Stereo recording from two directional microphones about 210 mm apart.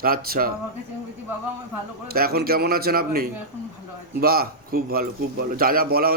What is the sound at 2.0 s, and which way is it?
A man's voice, 45° right (ahead or behind).